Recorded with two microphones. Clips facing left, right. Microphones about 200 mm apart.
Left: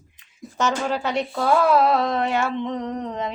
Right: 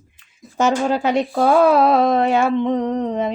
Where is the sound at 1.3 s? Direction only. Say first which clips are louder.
Right 4 dB; 50° right (ahead or behind).